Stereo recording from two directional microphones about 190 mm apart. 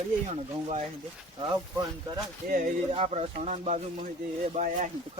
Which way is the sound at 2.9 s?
30° right (ahead or behind).